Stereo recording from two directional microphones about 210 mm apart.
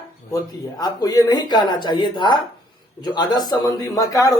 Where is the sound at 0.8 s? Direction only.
15° left (ahead or behind).